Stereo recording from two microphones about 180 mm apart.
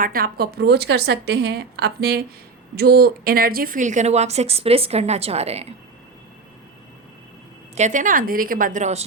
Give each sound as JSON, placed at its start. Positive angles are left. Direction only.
{"t": 0.0, "sound": "a woman's voice", "side_deg": -55}
{"t": 7.8, "sound": "a woman's voice", "side_deg": -45}